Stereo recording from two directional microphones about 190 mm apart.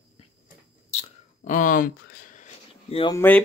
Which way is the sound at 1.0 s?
40° left (ahead or behind).